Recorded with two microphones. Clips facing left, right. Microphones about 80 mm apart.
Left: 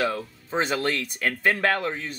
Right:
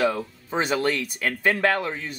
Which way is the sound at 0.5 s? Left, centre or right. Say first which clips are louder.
Right 1 dB; centre.